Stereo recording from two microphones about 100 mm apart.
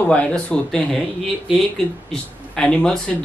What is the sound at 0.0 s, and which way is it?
Speech, 15° left (ahead or behind).